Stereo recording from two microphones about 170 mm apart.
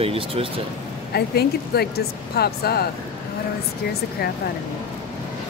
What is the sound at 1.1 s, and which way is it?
Speech, 70° left (ahead or behind).